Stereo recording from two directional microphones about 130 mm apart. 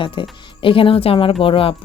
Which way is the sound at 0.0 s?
40° left (ahead or behind).